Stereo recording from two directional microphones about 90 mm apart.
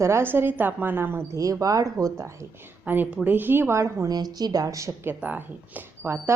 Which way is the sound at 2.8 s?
20° right (ahead or behind).